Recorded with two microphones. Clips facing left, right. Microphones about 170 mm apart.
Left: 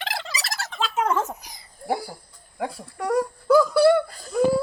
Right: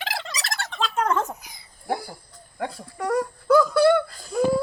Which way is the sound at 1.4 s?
40° left (ahead or behind).